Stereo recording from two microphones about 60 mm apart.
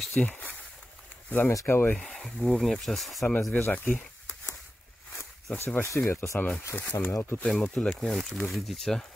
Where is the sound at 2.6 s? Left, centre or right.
Centre.